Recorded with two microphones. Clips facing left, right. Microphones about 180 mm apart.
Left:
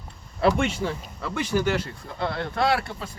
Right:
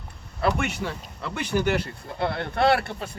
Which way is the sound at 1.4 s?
60° right (ahead or behind).